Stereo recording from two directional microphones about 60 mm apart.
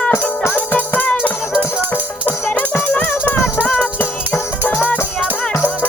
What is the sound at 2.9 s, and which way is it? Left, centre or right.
Music, left.